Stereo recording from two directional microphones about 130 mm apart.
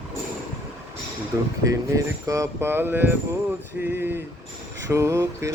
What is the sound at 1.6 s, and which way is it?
Speech, 25° right (ahead or behind).